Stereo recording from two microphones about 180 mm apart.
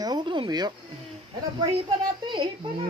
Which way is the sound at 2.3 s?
25° right (ahead or behind).